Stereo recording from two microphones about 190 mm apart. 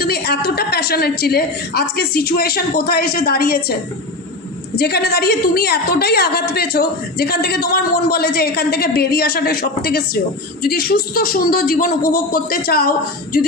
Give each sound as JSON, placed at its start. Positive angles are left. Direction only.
{"t": 0.0, "sound": "a woman's voice", "side_deg": 55}